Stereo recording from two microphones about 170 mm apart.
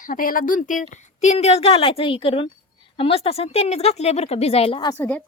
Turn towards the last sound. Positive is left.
turn(degrees=10)  # may be behind; listen again after turning